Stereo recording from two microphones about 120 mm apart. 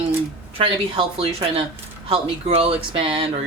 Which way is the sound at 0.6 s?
50° right (ahead or behind).